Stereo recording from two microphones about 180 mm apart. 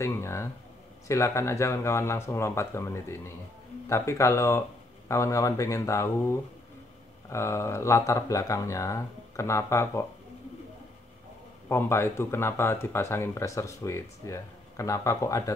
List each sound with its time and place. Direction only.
0.0 s speech: 15° left (ahead or behind)
11.7 s speech: 15° left (ahead or behind)